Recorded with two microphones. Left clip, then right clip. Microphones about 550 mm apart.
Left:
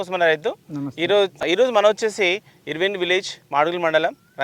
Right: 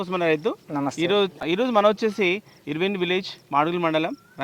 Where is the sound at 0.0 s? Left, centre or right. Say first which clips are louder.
Left 4 dB; left.